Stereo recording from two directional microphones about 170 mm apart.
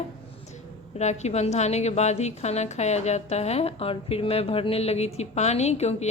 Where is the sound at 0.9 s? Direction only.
40° left (ahead or behind).